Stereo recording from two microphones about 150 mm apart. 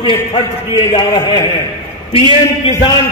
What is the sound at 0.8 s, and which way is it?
Speech, 25° left (ahead or behind).